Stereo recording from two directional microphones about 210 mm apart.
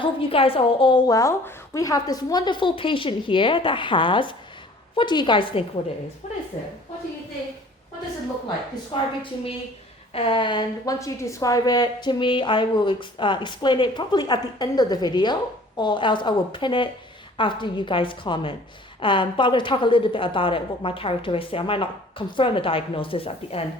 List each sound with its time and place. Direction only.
0.0 s speech: 25° left (ahead or behind)
6.2 s a sound: 30° left (ahead or behind)
8.9 s speech: 25° left (ahead or behind)